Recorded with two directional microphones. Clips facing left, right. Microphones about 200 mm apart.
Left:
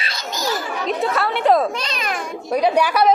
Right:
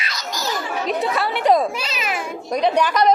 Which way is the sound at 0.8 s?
Centre (ahead or behind).